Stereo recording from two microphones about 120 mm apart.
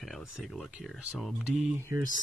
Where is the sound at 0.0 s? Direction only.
Centre (ahead or behind).